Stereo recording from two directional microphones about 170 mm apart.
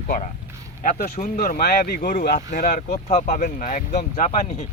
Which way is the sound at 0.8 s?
50° left (ahead or behind).